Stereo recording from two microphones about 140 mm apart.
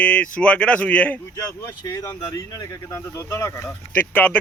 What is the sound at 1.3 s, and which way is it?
Speech, 25° left (ahead or behind).